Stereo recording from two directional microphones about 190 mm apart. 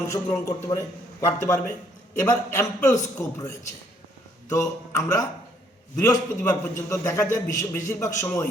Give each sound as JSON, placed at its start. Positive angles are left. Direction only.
{"t": 0.1, "sound": "a man's voice", "side_deg": 15}
{"t": 4.4, "sound": "a man's voice", "side_deg": 15}